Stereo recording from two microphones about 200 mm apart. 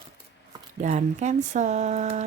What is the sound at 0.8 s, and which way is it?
Speech, 35° right (ahead or behind).